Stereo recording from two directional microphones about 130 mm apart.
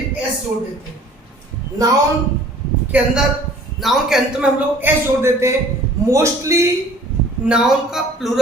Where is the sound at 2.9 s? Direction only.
10° right (ahead or behind).